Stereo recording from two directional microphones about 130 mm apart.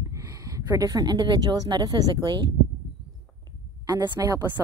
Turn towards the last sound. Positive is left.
turn(degrees=-30)  # may be behind; listen again after turning